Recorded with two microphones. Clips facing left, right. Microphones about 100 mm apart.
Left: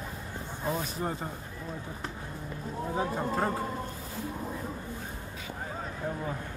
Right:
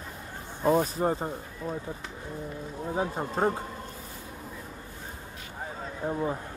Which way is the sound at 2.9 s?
25° right (ahead or behind).